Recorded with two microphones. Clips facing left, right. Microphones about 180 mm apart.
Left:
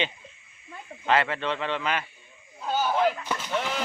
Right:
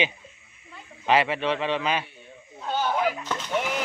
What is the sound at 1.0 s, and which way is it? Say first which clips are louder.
A man's voice: right 2 dB; 15° right (ahead or behind).